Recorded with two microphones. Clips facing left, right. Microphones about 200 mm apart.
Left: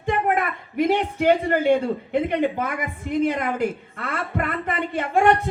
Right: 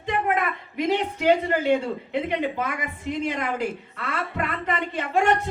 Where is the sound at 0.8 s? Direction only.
50° left (ahead or behind).